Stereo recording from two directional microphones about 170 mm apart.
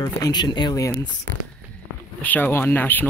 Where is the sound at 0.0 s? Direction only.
25° left (ahead or behind).